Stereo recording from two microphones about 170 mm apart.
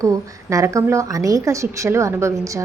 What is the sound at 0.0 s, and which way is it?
A woman's voice, 20° right (ahead or behind).